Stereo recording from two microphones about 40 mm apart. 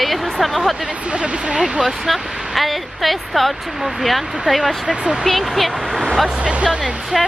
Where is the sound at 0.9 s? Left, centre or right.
Right.